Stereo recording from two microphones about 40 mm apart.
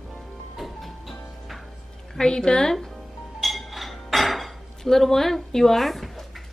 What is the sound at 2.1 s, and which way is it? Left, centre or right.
Speech, left.